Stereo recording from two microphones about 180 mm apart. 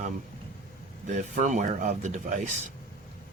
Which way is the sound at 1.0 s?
40° right (ahead or behind).